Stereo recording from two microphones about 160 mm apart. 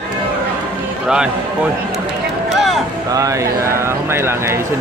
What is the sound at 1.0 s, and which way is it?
Speech, 5° right (ahead or behind).